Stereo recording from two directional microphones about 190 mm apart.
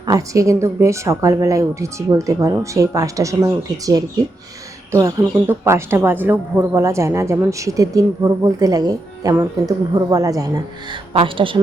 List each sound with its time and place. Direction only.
0.0 s a woman's voice: 20° right (ahead or behind)
11.1 s speech: 30° right (ahead or behind)